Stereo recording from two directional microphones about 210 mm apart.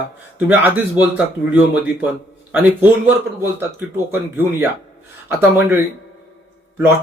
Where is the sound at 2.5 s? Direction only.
10° right (ahead or behind).